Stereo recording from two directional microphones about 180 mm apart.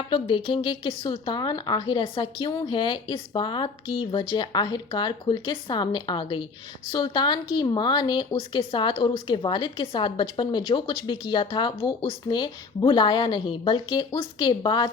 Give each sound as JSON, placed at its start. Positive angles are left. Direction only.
{"t": 0.1, "sound": "a woman's voice", "side_deg": 25}